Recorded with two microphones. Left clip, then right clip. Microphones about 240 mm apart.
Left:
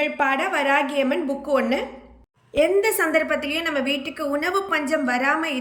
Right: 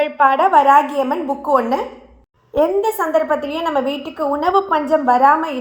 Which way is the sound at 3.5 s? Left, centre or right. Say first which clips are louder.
Right 4 dB; centre.